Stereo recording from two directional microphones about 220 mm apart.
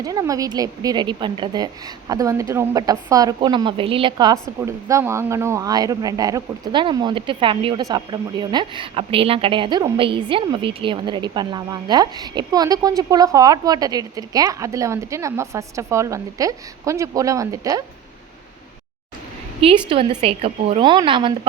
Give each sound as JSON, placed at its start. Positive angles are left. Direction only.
{"t": 0.0, "sound": "a woman's voice", "side_deg": -15}
{"t": 19.9, "sound": "a woman's voice", "side_deg": -25}